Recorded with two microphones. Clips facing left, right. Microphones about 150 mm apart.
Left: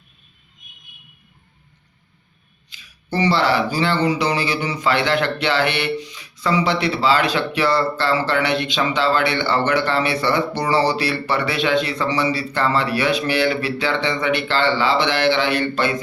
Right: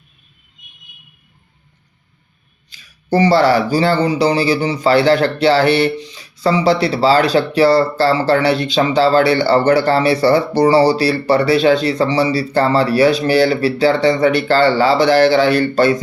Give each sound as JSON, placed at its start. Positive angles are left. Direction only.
{"t": 2.6, "sound": "speech", "side_deg": -40}